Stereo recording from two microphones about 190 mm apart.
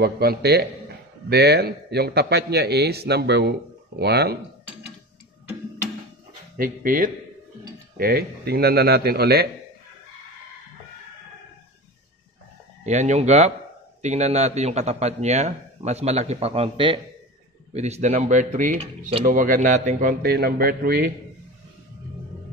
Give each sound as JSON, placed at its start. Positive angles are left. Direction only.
{"t": 0.0, "sound": "speech", "side_deg": -55}
{"t": 6.5, "sound": "a man's voice", "side_deg": -45}
{"t": 12.8, "sound": "a man's voice", "side_deg": -35}